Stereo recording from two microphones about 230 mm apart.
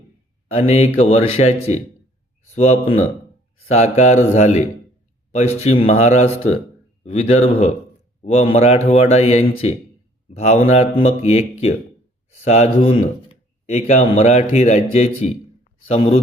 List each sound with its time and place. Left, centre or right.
0.9 s speech: left